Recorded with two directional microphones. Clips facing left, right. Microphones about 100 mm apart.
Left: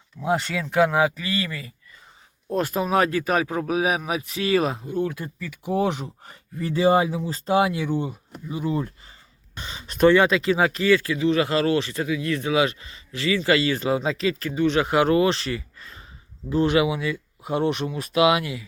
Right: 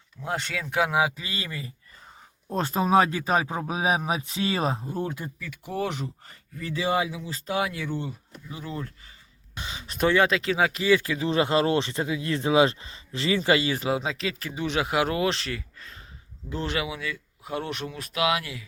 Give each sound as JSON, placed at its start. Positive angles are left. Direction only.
{"t": 0.3, "sound": "speech", "side_deg": 0}
{"t": 5.4, "sound": "speech", "side_deg": 0}
{"t": 5.7, "sound": "speech", "side_deg": 15}
{"t": 6.6, "sound": "speech", "side_deg": 35}
{"t": 9.6, "sound": "speech", "side_deg": -5}
{"t": 10.9, "sound": "speech", "side_deg": -20}